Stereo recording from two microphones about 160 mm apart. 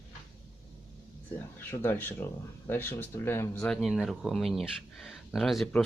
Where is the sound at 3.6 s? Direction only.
Centre (ahead or behind).